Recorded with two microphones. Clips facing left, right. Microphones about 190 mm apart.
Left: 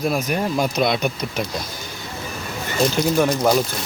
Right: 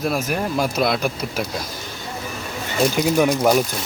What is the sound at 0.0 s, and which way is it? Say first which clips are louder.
Speech: left 1 dB; 5° right (ahead or behind).